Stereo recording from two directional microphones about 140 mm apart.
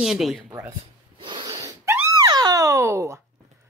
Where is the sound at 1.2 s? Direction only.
35° right (ahead or behind).